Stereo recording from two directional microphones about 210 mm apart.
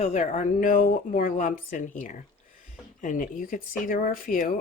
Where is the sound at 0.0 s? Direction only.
35° left (ahead or behind).